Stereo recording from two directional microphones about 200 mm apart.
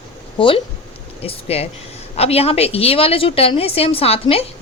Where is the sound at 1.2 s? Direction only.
30° left (ahead or behind).